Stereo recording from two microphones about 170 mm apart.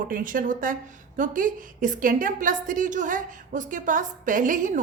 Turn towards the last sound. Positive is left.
turn(degrees=-50)  # may be behind; listen again after turning